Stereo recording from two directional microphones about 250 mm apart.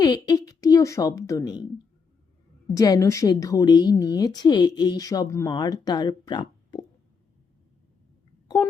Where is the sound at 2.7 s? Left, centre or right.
Centre.